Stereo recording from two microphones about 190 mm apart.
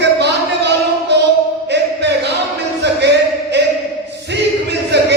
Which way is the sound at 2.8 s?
65° right (ahead or behind).